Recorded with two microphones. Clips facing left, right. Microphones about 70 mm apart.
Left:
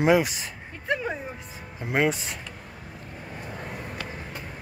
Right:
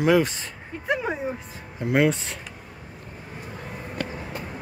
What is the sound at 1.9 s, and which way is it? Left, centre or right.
Speech, centre.